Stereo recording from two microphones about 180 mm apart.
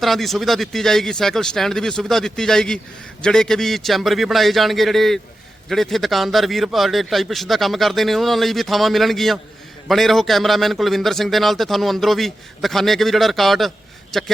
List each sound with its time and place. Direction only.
0.0 s speech: centre (ahead or behind)